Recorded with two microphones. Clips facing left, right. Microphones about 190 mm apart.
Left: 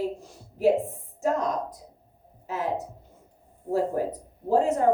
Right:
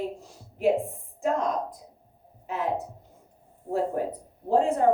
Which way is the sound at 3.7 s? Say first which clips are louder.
Left 1 dB; 40° left (ahead or behind).